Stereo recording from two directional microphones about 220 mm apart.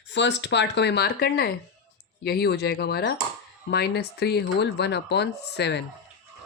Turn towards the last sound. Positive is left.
turn(degrees=50)  # may be behind; listen again after turning